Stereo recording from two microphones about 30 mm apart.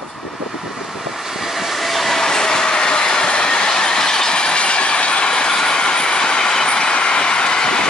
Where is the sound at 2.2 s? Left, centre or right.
Centre.